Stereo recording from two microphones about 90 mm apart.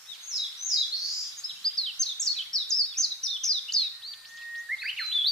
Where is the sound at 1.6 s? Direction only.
5° left (ahead or behind).